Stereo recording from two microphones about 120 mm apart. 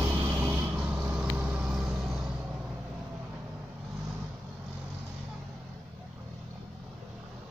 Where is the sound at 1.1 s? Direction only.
10° right (ahead or behind).